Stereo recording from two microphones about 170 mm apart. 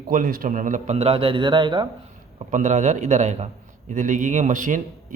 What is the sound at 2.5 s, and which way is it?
A man's voice, 45° right (ahead or behind).